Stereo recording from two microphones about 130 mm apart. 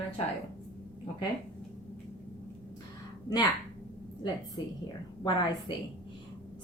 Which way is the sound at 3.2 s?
30° left (ahead or behind).